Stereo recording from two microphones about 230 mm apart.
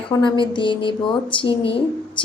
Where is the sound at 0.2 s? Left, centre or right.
Left.